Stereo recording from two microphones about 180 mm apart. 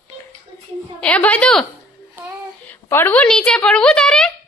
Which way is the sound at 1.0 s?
5° left (ahead or behind).